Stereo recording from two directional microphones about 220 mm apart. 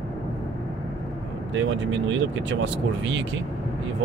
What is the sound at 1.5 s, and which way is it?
Speech, 60° right (ahead or behind).